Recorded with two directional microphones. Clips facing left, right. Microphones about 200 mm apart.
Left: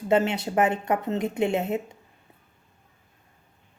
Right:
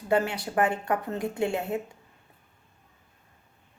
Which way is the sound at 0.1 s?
20° left (ahead or behind).